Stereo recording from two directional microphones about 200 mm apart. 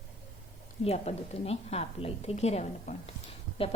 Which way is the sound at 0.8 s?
30° left (ahead or behind).